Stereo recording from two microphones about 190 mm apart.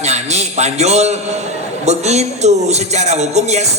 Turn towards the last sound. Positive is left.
turn(degrees=-35)  # may be behind; listen again after turning